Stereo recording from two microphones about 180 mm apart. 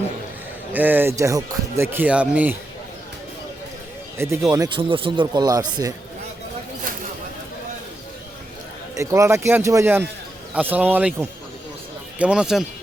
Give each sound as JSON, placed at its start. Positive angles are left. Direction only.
{"t": 0.7, "sound": "speech", "side_deg": -10}
{"t": 4.2, "sound": "speech", "side_deg": -15}
{"t": 9.0, "sound": "speech", "side_deg": -15}